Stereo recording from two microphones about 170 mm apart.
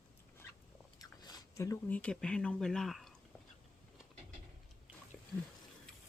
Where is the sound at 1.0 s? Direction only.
20° left (ahead or behind).